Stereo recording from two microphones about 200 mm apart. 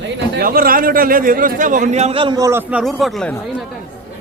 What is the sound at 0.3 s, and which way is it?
Speech, 45° right (ahead or behind).